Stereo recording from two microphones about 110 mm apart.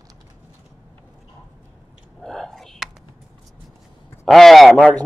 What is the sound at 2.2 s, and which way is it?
Whispering, 5° left (ahead or behind).